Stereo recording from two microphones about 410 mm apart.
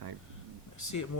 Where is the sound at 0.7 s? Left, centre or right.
Left.